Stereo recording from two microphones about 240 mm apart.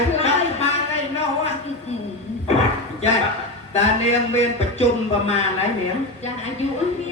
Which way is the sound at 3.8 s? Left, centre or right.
Left.